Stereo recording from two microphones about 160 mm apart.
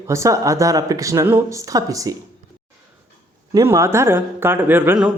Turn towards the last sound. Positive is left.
turn(degrees=-10)  # may be behind; listen again after turning